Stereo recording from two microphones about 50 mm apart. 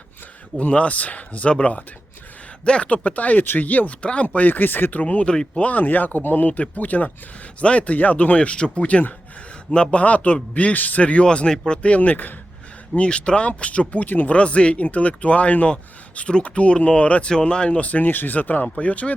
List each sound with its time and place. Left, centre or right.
0.6 s speech: left
4.4 s speech: left
5.0 s speech: left
5.6 s speech: left; by 11.8 s centre
11.8 s speech: left
13.0 s speech: left